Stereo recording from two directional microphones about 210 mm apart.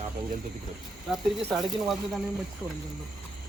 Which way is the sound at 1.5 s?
Centre (ahead or behind).